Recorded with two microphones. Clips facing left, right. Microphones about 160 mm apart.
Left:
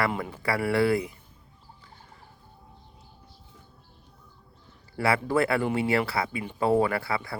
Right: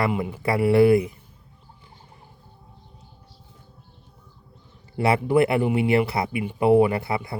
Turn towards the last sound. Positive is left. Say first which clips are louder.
# right 3 dB
turn(degrees=-20)  # may be behind; listen again after turning